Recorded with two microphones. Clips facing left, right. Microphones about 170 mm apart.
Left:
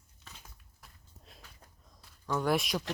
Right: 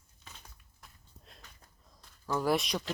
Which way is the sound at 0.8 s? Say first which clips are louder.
Right 1 dB; centre (ahead or behind).